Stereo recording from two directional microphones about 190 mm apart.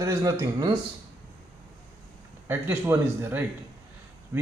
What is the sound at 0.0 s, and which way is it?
Speech, 15° right (ahead or behind).